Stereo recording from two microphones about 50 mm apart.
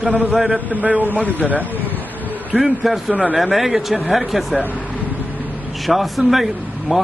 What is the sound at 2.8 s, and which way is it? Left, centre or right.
A man's voice, centre.